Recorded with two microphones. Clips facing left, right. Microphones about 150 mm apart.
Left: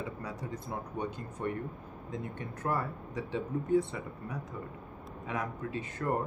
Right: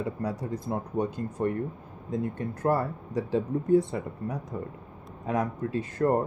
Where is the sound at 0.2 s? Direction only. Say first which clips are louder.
Right 8 dB; 40° right (ahead or behind).